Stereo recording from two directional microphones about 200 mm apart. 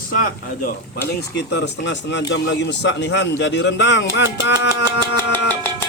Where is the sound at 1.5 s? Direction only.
60° left (ahead or behind).